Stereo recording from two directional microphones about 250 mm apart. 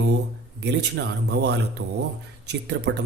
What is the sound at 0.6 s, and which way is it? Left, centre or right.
A man's voice, right.